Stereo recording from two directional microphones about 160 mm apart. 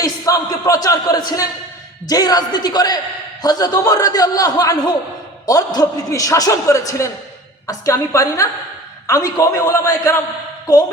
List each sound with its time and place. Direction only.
0.0 s a man's voice: 20° left (ahead or behind)